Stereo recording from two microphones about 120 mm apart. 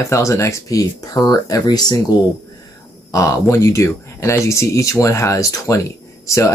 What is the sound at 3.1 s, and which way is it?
Speech, 25° left (ahead or behind).